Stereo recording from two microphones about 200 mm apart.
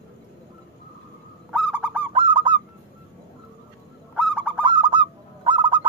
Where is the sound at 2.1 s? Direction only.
25° right (ahead or behind).